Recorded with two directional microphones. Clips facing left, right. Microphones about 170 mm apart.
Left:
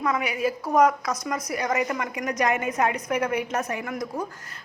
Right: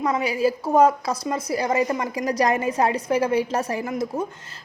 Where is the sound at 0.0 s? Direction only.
30° right (ahead or behind).